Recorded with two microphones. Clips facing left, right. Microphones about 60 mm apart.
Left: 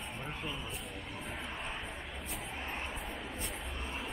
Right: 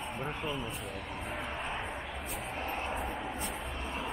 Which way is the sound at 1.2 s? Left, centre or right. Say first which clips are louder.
Right 4 dB; centre.